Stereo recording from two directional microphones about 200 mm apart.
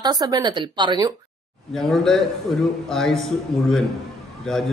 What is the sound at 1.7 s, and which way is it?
A man's voice, centre (ahead or behind).